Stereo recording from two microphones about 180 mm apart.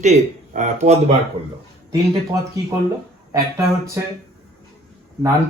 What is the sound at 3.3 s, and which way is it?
Speech, 15° right (ahead or behind).